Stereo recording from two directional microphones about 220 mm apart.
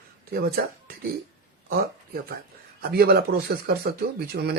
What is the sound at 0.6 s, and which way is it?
Speech, 45° right (ahead or behind).